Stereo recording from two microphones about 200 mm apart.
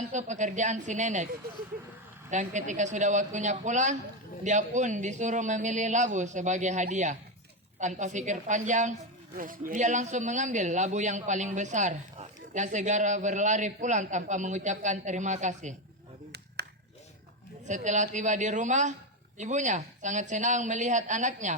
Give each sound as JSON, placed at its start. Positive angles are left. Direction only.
{"t": 0.1, "sound": "speech", "side_deg": -35}
{"t": 2.3, "sound": "speech", "side_deg": -35}
{"t": 17.7, "sound": "speech", "side_deg": -35}